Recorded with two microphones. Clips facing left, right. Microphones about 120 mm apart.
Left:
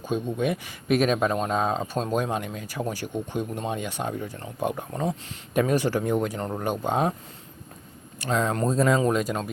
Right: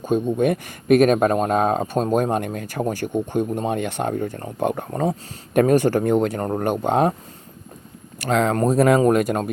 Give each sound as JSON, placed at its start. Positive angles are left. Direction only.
{"t": 0.0, "sound": "speech", "side_deg": -50}
{"t": 8.2, "sound": "speech", "side_deg": -80}
{"t": 8.6, "sound": "speech", "side_deg": -70}
{"t": 9.0, "sound": "speech", "side_deg": -55}